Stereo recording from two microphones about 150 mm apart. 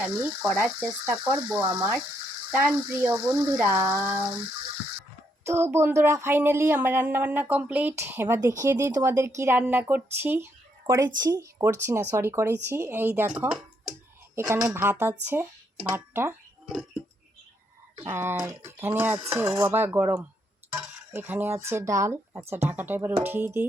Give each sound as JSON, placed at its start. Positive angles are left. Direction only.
{"t": 0.0, "sound": "speech", "side_deg": -10}
{"t": 5.5, "sound": "speech", "side_deg": -15}
{"t": 14.3, "sound": "speech", "side_deg": -20}
{"t": 18.1, "sound": "speech", "side_deg": -15}